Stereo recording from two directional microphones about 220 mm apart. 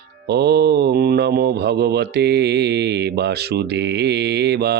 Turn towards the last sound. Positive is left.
turn(degrees=-50)  # may be behind; listen again after turning